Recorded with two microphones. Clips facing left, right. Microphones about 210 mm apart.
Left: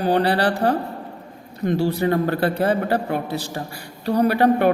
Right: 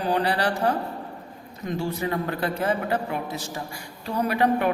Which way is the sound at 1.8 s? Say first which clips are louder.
Left 6 dB; 35° left (ahead or behind).